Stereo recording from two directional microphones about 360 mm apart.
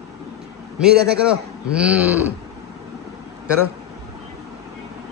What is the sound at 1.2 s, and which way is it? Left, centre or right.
A man's voice, centre.